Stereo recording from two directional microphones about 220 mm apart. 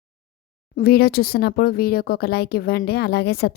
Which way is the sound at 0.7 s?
45° left (ahead or behind).